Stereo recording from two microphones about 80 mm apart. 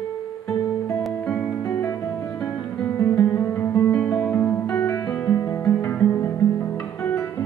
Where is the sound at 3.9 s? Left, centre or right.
Centre.